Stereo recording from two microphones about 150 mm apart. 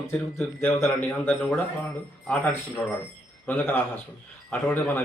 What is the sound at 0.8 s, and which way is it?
A man's voice, 15° left (ahead or behind).